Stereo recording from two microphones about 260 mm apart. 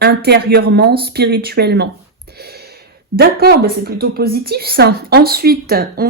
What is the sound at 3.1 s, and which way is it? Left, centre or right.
A woman's voice, right.